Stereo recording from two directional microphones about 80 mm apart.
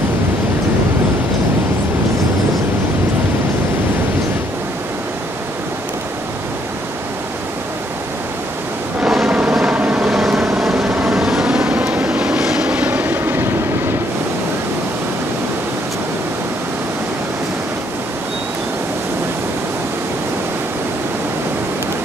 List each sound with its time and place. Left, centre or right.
9.0 s vehicle: centre
10.1 s vehicle: centre; by 13.5 s right